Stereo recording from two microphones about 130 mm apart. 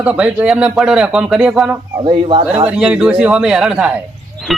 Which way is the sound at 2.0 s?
45° right (ahead or behind).